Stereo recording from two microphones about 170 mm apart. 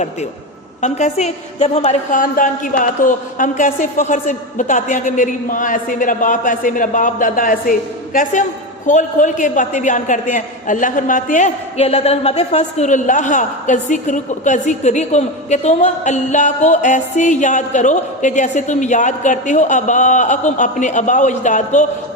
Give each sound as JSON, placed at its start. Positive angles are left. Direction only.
{"t": 0.8, "sound": "a man's voice", "side_deg": 45}